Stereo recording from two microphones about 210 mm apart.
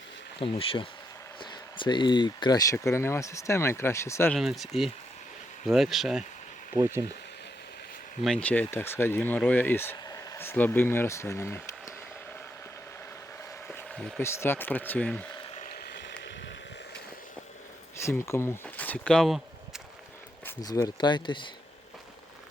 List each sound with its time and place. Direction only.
0.3 s speech: 25° left (ahead or behind)
4.4 s speech: centre (ahead or behind)
6.7 s speech: 15° right (ahead or behind)
8.2 s speech: 5° left (ahead or behind)
13.7 s speech: 5° left (ahead or behind)
15.5 s a sound: 40° left (ahead or behind)
16.0 s a sound: 55° left (ahead or behind)
17.9 s a sound: 15° left (ahead or behind)
20.4 s speech: 20° left (ahead or behind)